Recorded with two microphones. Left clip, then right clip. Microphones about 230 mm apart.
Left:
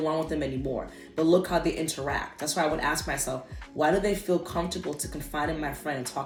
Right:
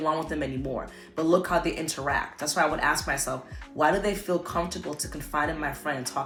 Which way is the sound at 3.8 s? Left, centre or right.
Right.